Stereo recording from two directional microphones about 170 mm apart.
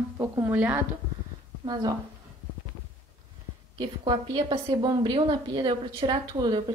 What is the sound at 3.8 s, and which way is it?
A woman's voice, 30° right (ahead or behind).